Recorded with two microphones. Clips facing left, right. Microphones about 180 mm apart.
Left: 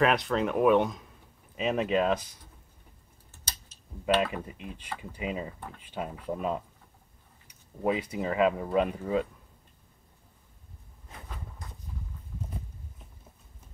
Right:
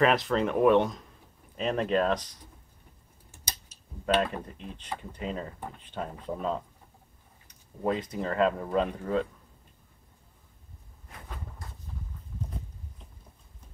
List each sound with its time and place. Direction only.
0.0 s speech: centre (ahead or behind)
4.0 s speech: 10° left (ahead or behind)